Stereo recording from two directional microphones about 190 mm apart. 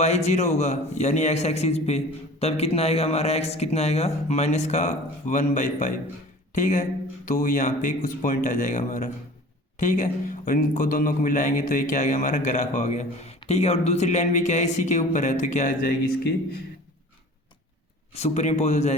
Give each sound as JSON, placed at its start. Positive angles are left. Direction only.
{"t": 0.0, "sound": "a man's voice", "side_deg": 35}
{"t": 18.1, "sound": "a man's voice", "side_deg": 35}